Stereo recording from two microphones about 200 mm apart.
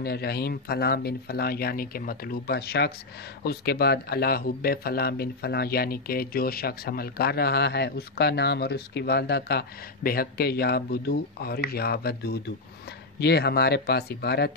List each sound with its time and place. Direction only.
0.0 s speech: 50° left (ahead or behind)